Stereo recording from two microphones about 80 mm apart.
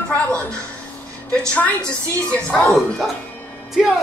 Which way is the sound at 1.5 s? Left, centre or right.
Centre.